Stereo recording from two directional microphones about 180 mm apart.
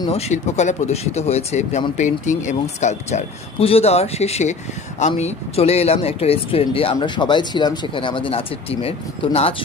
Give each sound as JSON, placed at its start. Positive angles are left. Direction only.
{"t": 0.3, "sound": "speech", "side_deg": 40}